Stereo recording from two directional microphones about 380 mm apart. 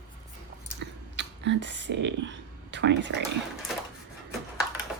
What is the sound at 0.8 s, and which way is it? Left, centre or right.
Whispering, right.